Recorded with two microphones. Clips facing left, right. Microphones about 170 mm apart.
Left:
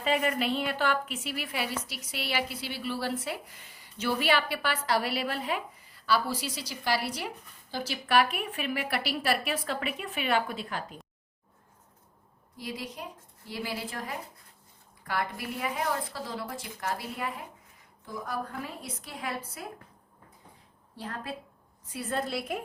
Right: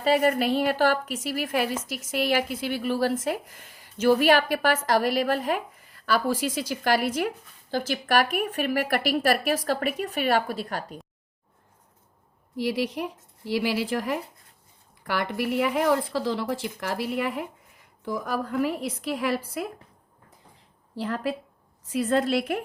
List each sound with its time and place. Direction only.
0.0 s a woman's voice: 40° right (ahead or behind)
12.5 s speech: 80° right
18.0 s a woman's voice: 90° right
20.9 s a woman's voice: 90° right